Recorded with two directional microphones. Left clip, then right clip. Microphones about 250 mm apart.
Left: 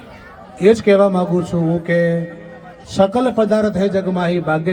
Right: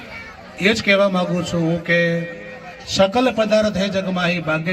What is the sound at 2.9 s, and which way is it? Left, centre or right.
Speech, left.